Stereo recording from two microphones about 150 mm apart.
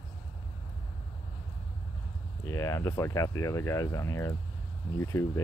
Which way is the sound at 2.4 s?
20° left (ahead or behind).